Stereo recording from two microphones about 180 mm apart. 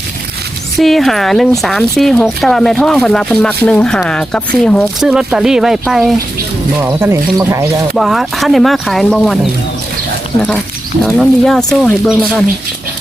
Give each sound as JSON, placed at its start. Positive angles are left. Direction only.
{"t": 0.8, "sound": "speech", "side_deg": 0}
{"t": 6.8, "sound": "speech", "side_deg": -15}
{"t": 7.9, "sound": "speech", "side_deg": 0}
{"t": 11.0, "sound": "speech", "side_deg": 0}